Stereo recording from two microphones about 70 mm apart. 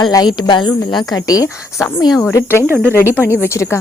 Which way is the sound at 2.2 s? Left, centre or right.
Left.